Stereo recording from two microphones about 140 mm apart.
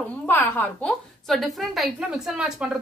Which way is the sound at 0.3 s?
15° left (ahead or behind).